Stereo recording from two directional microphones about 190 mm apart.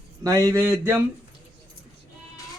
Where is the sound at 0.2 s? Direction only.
20° right (ahead or behind).